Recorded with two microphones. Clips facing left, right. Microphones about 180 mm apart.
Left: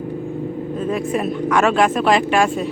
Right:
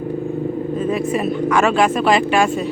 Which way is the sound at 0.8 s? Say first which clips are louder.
Right 1 dB; 5° right (ahead or behind).